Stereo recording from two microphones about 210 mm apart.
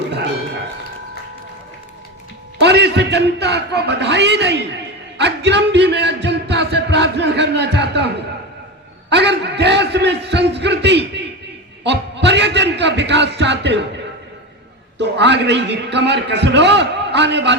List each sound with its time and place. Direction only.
2.6 s a man's voice: 55° right (ahead or behind)
6.2 s a sound: 55° right (ahead or behind)
11.8 s a man's voice: 55° right (ahead or behind)
14.9 s a man's voice: 55° right (ahead or behind)